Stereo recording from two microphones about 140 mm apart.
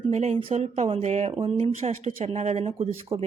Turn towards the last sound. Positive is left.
turn(degrees=-45)  # may be behind; listen again after turning